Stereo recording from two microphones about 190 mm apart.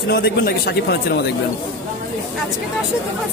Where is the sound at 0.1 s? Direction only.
55° left (ahead or behind).